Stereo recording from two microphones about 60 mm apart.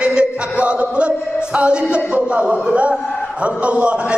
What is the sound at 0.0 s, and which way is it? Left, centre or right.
Chant, centre.